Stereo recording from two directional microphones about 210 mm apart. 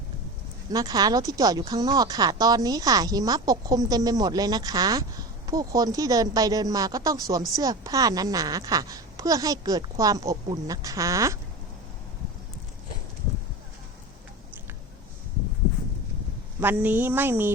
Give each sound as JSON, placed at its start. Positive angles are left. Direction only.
{"t": 0.7, "sound": "speech", "side_deg": -20}
{"t": 16.6, "sound": "speech", "side_deg": -10}